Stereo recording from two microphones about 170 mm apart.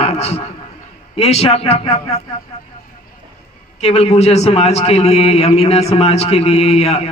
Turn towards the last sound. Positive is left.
turn(degrees=40)  # may be behind; listen again after turning